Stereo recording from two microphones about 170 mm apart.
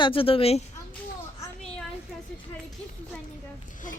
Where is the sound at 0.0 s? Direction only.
30° left (ahead or behind).